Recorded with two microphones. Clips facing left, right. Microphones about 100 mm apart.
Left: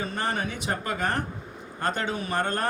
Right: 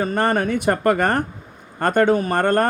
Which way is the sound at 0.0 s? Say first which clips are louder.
Right 10 dB; 50° right (ahead or behind).